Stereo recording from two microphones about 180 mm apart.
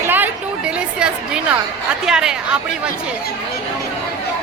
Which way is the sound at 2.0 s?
5° right (ahead or behind).